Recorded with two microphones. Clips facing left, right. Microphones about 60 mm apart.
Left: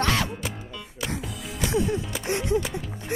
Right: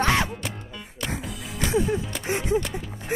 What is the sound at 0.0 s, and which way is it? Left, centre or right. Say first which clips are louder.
Music: right 2 dB; right.